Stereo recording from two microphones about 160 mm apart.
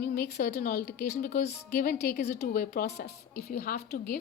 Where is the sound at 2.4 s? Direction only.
70° left (ahead or behind).